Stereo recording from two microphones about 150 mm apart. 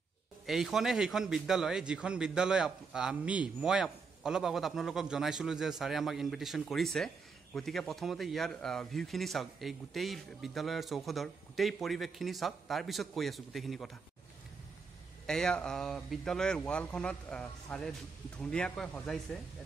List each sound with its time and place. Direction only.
0.5 s a man's voice: centre (ahead or behind)
15.2 s a man's voice: 5° left (ahead or behind)